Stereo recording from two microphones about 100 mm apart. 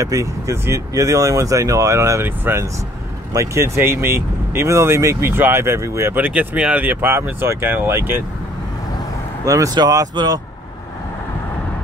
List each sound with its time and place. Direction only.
0.0 s speech: 30° right (ahead or behind)
6.2 s speech: 15° right (ahead or behind)
9.4 s speech: 30° right (ahead or behind)
9.8 s speech: 40° right (ahead or behind)